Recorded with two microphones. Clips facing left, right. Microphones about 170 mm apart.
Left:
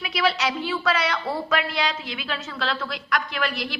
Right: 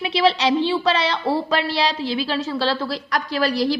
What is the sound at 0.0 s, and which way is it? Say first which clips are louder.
A woman's voice: right 6 dB; 30° right (ahead or behind).